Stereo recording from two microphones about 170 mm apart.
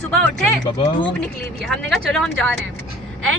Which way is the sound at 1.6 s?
Centre (ahead or behind).